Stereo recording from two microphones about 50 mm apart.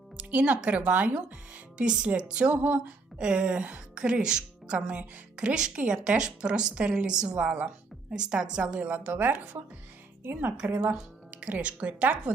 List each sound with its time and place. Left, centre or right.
0.2 s a woman's voice: right
9.1 s speech: right
10.9 s speech: right